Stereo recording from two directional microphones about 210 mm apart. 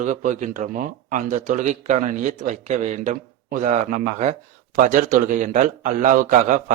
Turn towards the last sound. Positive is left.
turn(degrees=-40)  # may be behind; listen again after turning